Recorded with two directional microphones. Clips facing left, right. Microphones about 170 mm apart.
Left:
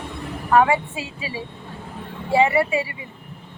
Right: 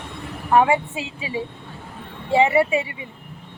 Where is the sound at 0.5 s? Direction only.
20° right (ahead or behind).